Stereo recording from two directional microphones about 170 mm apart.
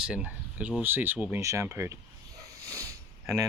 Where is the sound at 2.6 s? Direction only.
20° right (ahead or behind).